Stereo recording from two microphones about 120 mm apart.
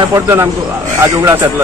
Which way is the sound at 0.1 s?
20° right (ahead or behind).